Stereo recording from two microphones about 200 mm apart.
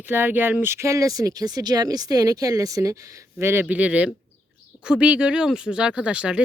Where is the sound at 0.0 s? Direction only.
10° right (ahead or behind).